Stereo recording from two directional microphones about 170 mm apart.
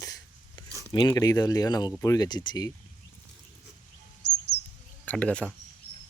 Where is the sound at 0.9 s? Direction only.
20° left (ahead or behind).